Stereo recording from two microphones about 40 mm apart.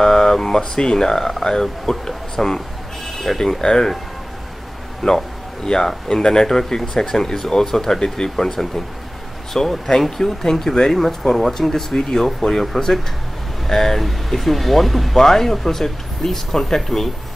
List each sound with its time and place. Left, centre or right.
0.0 s speech: centre
5.0 s speech: centre